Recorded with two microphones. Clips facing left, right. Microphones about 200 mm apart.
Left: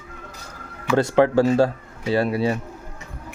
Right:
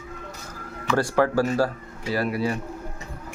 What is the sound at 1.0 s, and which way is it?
Speech, 20° left (ahead or behind).